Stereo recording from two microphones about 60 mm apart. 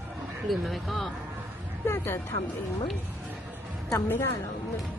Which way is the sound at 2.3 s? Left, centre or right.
Left.